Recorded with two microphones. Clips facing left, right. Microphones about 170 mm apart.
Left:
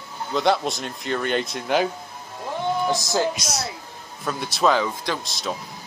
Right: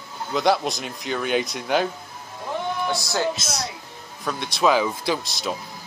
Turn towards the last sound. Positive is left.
turn(degrees=0)  # may be behind; listen again after turning